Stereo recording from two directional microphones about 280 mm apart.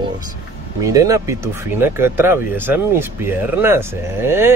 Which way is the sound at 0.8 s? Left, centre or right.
Centre.